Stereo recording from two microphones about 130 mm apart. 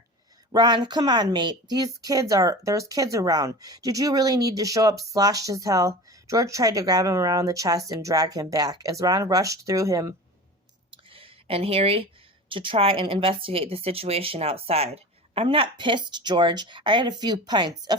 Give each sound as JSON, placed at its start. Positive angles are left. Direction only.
{"t": 0.5, "sound": "speech", "side_deg": -35}
{"t": 10.9, "sound": "a sound", "side_deg": -45}
{"t": 12.5, "sound": "a woman's voice", "side_deg": -40}